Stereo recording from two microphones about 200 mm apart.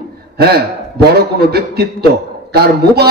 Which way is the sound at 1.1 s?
50° right (ahead or behind).